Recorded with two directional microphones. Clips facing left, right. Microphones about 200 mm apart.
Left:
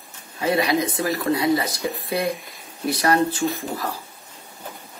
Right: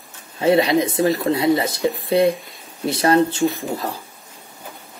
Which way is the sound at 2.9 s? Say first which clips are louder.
Right 4 dB; 25° right (ahead or behind).